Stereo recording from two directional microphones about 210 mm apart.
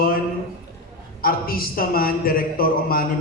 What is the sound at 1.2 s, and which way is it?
A man's voice, 45° left (ahead or behind).